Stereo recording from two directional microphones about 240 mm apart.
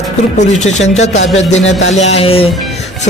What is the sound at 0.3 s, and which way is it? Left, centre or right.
Speech, left.